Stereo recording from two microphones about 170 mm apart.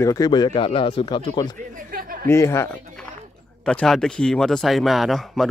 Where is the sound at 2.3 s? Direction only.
15° left (ahead or behind).